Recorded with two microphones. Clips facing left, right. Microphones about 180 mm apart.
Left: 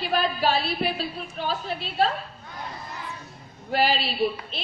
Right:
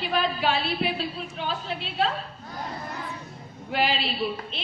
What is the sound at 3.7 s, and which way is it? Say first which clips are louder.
Speech: left 2 dB; 40° left (ahead or behind).